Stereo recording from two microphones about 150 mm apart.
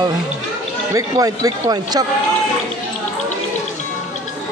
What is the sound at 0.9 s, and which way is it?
Speech, 25° right (ahead or behind).